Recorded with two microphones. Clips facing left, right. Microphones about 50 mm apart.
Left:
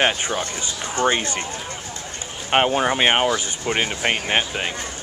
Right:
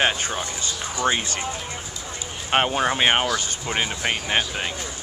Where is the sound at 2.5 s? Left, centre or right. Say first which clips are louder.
Left 2 dB; centre.